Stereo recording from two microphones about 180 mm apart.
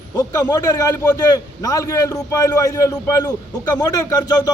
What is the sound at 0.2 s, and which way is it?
A man's voice, 20° left (ahead or behind).